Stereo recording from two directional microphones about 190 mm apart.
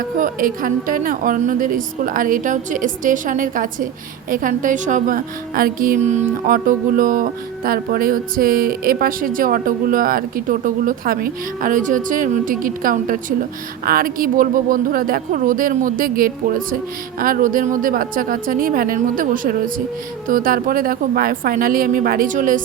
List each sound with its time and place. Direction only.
0.2 s a woman's voice: 45° right (ahead or behind)